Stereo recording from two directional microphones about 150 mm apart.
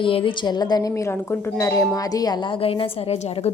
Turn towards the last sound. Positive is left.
turn(degrees=45)  # may be behind; listen again after turning